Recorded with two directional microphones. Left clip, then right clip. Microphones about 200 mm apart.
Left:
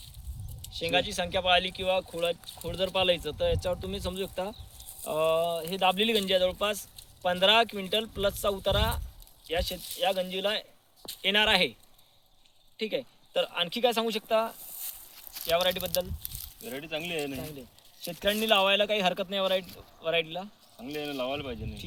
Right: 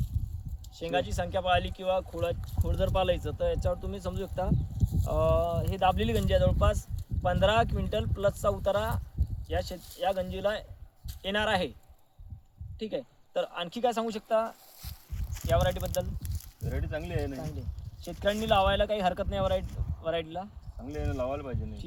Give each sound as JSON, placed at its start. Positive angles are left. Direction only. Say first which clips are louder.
{"t": 0.7, "sound": "speech", "louder": "left 3 dB", "side_deg": 10}
{"t": 12.7, "sound": "speech", "louder": "left 3 dB", "side_deg": 10}
{"t": 16.6, "sound": "speech", "louder": "left 2 dB", "side_deg": -10}
{"t": 18.0, "sound": "speech", "louder": "left 2 dB", "side_deg": 0}
{"t": 21.0, "sound": "speech", "louder": "even", "side_deg": -15}